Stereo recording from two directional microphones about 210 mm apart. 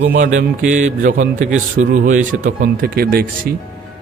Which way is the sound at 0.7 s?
35° right (ahead or behind).